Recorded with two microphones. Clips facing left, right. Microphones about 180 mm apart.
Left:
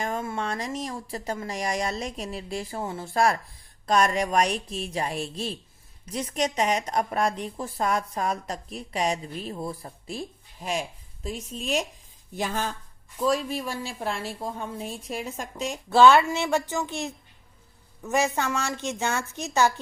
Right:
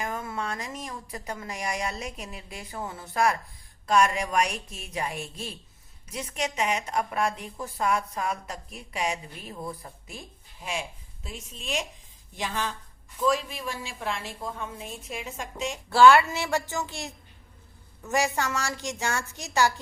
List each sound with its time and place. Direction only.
0.0 s a woman's voice: 25° left (ahead or behind); by 12.7 s 45° left (ahead or behind)
13.1 s a woman's voice: 35° left (ahead or behind)
15.9 s speech: 20° left (ahead or behind)
18.1 s speech: 20° left (ahead or behind)